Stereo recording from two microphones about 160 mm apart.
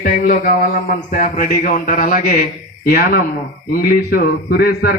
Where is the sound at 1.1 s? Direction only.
55° left (ahead or behind).